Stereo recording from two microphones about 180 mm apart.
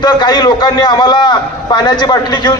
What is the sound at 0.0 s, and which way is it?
A man's voice, 25° left (ahead or behind).